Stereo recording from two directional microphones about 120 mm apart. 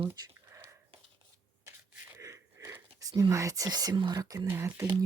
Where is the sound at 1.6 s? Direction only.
25° right (ahead or behind).